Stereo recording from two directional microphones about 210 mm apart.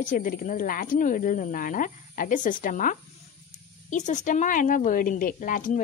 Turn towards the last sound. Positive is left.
turn(degrees=40)  # may be behind; listen again after turning